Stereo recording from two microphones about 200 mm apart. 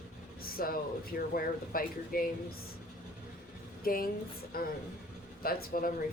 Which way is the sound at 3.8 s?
45° left (ahead or behind).